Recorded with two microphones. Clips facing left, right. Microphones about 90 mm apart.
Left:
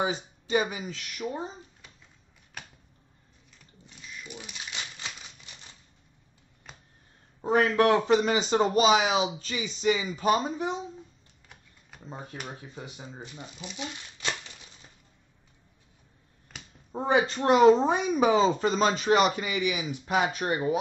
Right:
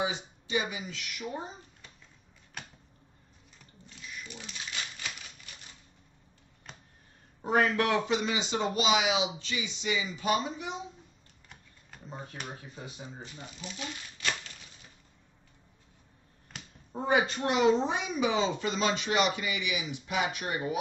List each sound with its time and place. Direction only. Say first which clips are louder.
0.0 s speech: left 3 dB; 45° left (ahead or behind)
4.3 s a sound: left 3 dB; 15° left (ahead or behind)
5.0 s typewriter: even; 20° left (ahead or behind)
6.7 s a sound: even; 5° left (ahead or behind)
7.4 s speech: left 4 dB; 35° left (ahead or behind)
12.9 s speech: left 2 dB; 20° left (ahead or behind)
16.9 s speech: left 3 dB; 30° left (ahead or behind)